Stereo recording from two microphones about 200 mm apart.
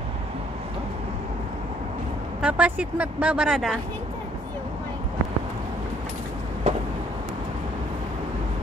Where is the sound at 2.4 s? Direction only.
5° right (ahead or behind).